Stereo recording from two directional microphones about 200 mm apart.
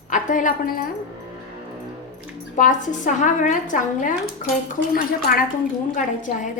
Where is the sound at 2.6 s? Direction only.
40° left (ahead or behind).